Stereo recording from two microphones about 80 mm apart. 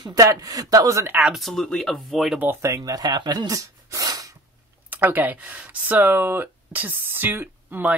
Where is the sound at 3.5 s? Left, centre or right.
Right.